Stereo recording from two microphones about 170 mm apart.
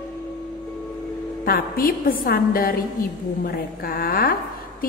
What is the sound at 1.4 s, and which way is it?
A woman's voice, 60° left (ahead or behind).